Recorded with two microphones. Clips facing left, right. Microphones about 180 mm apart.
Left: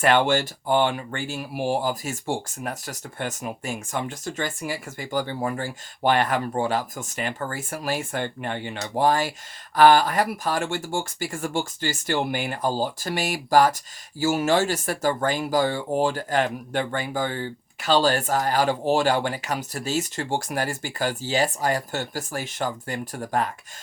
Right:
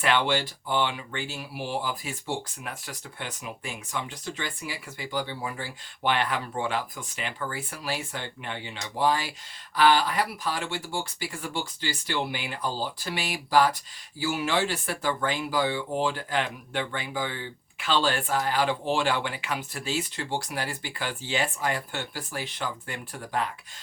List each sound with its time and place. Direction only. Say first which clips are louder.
0.0 s speech: left 5 dB; 45° left (ahead or behind)